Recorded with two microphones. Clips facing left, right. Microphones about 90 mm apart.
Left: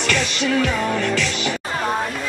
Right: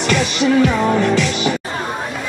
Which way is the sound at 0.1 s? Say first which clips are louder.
Right 6 dB; 5° right (ahead or behind).